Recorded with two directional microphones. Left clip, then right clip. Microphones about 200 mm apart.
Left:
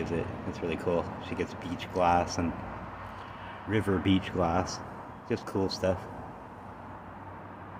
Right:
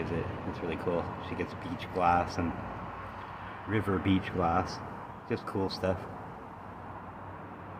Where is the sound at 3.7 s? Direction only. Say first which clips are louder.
Left 2 dB; 15° left (ahead or behind).